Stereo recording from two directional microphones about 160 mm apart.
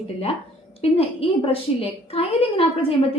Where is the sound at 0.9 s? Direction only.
35° left (ahead or behind).